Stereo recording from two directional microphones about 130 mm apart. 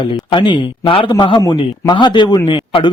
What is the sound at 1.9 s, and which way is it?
A man's voice, 35° left (ahead or behind).